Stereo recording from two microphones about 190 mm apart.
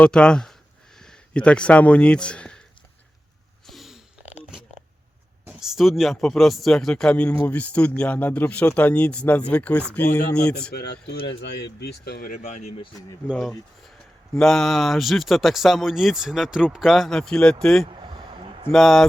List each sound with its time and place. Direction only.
0.0 s speech: 5° left (ahead or behind)
3.7 s a sound: centre (ahead or behind)
5.5 s speech: 5° right (ahead or behind)
10.5 s speech: 55° left (ahead or behind); by 12.9 s 35° left (ahead or behind)
13.2 s speech: centre (ahead or behind)
17.8 s a sound: 25° right (ahead or behind)
18.7 s speech: centre (ahead or behind)